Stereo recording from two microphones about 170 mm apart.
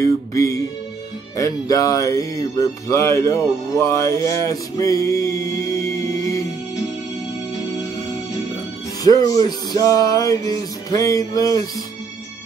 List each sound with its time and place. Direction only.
0.0 s speech: 20° left (ahead or behind)
9.0 s speech: 20° left (ahead or behind)